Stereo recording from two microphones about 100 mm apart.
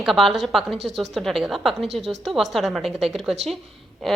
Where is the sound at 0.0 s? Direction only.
Centre (ahead or behind).